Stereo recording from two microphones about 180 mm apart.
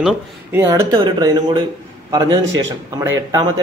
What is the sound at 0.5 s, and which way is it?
A man's voice, 15° right (ahead or behind).